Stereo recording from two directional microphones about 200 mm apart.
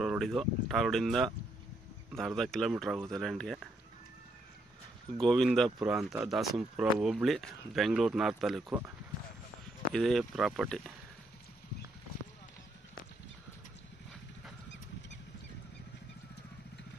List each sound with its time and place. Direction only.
0.0 s speech: centre (ahead or behind)
5.1 s speech: centre (ahead or behind)
9.9 s speech: centre (ahead or behind)